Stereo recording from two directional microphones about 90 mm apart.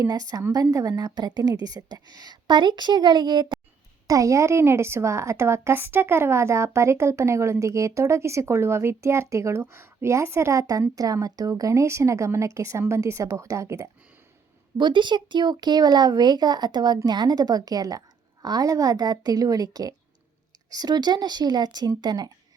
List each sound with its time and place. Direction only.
0.0 s a woman's voice: 45° right (ahead or behind)
4.0 s a woman's voice: 40° right (ahead or behind)
14.8 s a woman's voice: 60° right (ahead or behind)